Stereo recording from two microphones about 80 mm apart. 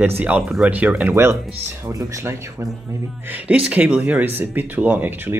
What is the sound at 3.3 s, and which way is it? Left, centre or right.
Speech, right.